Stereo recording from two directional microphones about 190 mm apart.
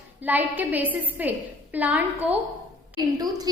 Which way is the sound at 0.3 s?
10° right (ahead or behind).